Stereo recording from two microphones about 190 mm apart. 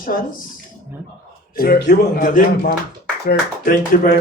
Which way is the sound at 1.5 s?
50° left (ahead or behind).